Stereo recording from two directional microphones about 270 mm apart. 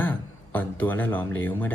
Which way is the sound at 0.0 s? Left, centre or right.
Centre.